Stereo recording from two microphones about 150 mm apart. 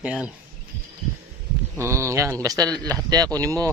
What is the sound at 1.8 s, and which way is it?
Speech, 20° right (ahead or behind).